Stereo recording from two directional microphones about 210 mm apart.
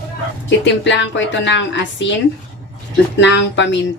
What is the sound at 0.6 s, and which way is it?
Speech, 60° left (ahead or behind).